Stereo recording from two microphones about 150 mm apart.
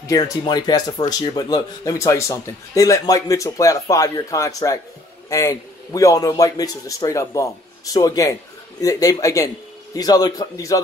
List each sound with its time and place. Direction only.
0.0 s speech: 25° left (ahead or behind)